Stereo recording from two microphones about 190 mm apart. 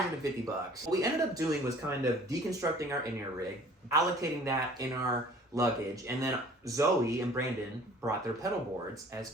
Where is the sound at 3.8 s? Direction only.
15° right (ahead or behind).